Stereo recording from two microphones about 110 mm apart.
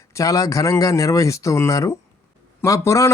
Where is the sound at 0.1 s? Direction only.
30° left (ahead or behind).